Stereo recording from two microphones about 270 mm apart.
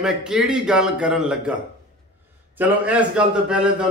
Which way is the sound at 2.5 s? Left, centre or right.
Centre.